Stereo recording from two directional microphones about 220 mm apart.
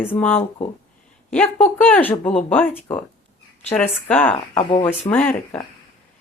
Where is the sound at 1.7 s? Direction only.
10° left (ahead or behind).